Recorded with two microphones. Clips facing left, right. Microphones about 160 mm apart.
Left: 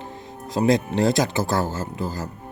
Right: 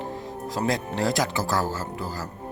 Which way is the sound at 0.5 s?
20° left (ahead or behind).